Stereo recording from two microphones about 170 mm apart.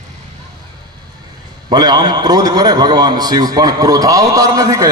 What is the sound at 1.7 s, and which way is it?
A man's voice, 25° right (ahead or behind).